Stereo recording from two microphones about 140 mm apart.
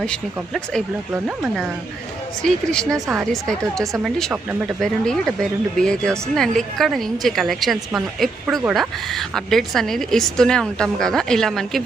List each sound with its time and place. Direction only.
0.0 s speech: 5° left (ahead or behind)
2.4 s speech: 5° left (ahead or behind)